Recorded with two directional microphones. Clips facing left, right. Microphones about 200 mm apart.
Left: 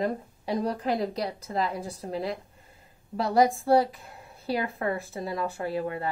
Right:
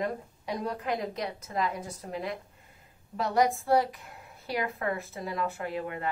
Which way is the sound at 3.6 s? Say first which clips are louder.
Left 3 dB; 30° left (ahead or behind).